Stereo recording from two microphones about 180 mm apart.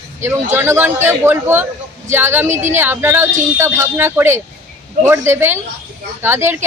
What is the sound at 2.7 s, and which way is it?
Speech, 10° right (ahead or behind).